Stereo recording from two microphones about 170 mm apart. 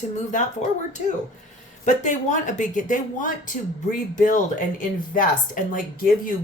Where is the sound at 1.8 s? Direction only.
45° left (ahead or behind).